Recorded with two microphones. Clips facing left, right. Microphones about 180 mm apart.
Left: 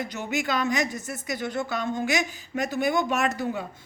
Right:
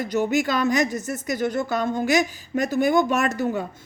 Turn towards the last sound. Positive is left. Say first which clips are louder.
# right 4 dB
turn(degrees=-45)  # may be behind; listen again after turning